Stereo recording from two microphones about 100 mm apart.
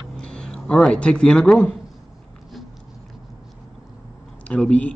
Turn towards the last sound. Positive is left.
turn(degrees=10)  # may be behind; listen again after turning